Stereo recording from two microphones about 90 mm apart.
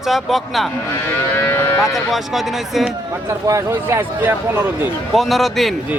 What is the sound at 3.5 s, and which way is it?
A man's voice, 30° right (ahead or behind).